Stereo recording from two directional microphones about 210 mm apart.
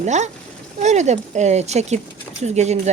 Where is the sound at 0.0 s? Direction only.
35° right (ahead or behind).